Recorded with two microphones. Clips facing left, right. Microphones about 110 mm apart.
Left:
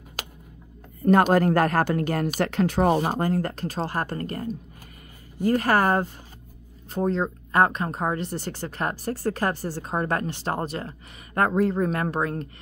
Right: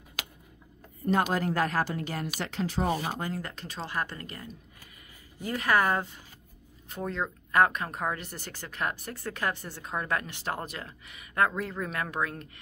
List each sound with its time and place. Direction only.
1.0 s speech: 55° left (ahead or behind)
2.9 s speech: 45° left (ahead or behind)